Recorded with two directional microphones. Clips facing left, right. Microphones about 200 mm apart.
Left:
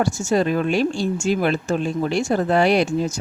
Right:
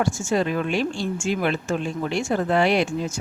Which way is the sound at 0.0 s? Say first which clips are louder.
Left 3 dB; 40° left (ahead or behind).